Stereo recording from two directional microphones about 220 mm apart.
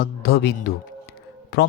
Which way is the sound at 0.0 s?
45° left (ahead or behind).